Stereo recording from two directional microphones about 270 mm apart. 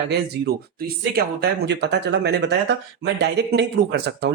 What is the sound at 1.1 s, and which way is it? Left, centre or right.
Speech, right.